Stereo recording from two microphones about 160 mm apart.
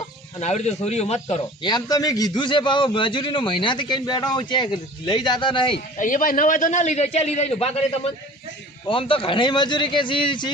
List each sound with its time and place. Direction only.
0.3 s a man's voice: 45° left (ahead or behind)
1.6 s a man's voice: 25° left (ahead or behind)
6.0 s a man's voice: 55° left (ahead or behind); by 7.9 s 40° left (ahead or behind)
8.9 s speech: 35° left (ahead or behind)